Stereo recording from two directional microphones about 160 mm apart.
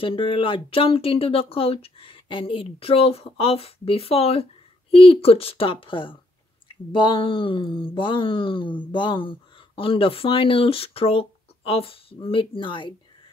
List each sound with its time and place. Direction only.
0.0 s speech: 35° left (ahead or behind)